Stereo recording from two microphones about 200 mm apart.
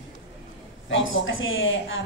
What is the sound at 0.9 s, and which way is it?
A woman's voice, 75° left (ahead or behind).